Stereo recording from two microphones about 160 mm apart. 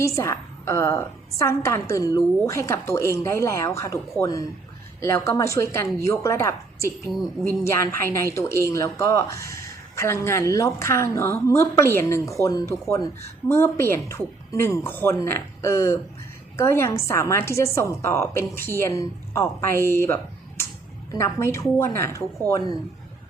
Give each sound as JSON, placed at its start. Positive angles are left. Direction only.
{"t": 0.2, "sound": "a woman's voice", "side_deg": 15}